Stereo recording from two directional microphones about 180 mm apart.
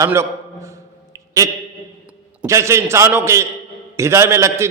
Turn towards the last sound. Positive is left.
turn(degrees=-15)  # may be behind; listen again after turning